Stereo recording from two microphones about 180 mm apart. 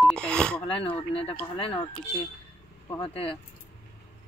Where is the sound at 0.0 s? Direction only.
5° left (ahead or behind).